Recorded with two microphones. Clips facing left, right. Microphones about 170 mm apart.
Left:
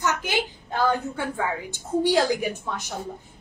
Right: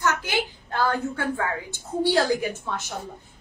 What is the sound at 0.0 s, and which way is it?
A woman's voice, 15° left (ahead or behind).